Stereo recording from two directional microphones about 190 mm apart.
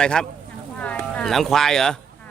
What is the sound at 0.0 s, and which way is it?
A man's voice, 5° left (ahead or behind).